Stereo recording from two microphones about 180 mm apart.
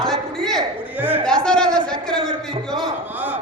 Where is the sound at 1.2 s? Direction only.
5° left (ahead or behind).